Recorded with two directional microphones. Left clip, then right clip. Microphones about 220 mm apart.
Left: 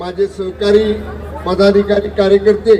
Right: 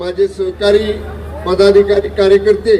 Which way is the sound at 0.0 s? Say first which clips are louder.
Right 3 dB; 50° right (ahead or behind).